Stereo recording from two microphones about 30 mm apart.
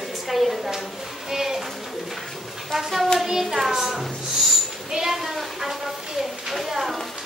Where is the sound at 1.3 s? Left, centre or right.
Centre.